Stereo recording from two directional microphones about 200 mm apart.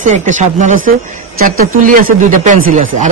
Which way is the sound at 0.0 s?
35° right (ahead or behind).